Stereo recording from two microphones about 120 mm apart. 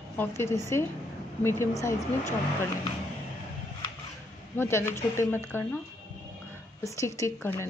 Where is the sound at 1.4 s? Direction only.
20° left (ahead or behind).